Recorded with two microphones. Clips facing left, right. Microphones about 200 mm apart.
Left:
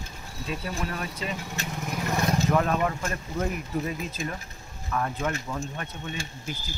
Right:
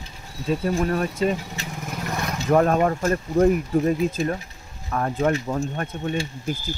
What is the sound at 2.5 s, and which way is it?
Speech, 45° right (ahead or behind).